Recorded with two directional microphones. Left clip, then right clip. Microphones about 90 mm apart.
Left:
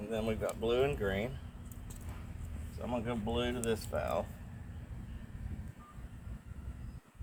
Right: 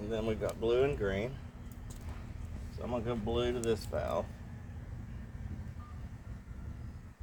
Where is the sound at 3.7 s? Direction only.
20° right (ahead or behind).